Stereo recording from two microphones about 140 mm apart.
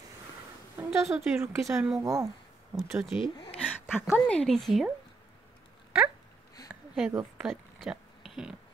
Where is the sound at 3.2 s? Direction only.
35° left (ahead or behind).